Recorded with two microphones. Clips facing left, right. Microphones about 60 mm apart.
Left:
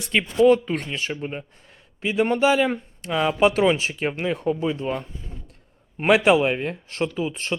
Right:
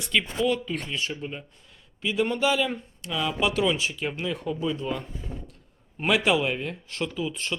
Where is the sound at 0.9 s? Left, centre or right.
Left.